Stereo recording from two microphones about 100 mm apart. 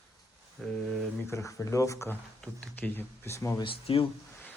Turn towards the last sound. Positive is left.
turn(degrees=70)  # may be behind; listen again after turning